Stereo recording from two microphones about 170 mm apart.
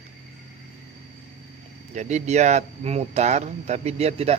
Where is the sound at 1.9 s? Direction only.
45° right (ahead or behind).